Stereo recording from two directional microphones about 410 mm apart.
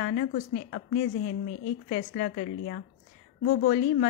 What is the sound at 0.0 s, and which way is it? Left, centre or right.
Speech, left.